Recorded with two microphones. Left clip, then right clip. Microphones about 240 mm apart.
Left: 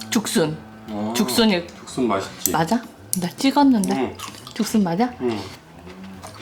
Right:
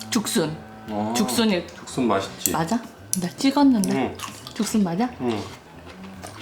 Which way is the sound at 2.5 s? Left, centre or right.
Centre.